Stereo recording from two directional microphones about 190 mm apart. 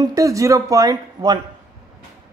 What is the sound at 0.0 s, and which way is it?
Speech, 20° right (ahead or behind).